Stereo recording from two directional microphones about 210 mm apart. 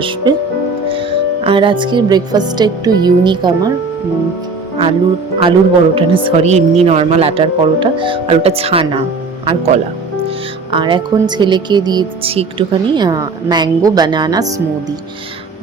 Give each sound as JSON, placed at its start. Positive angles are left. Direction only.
{"t": 1.5, "sound": "speech", "side_deg": -25}
{"t": 5.4, "sound": "speech", "side_deg": -25}